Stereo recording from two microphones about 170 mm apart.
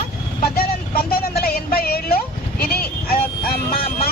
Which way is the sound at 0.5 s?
65° left (ahead or behind).